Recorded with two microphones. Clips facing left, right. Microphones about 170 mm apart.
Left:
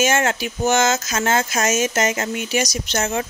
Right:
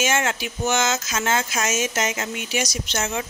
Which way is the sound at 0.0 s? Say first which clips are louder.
Left 4 dB; 45° left (ahead or behind).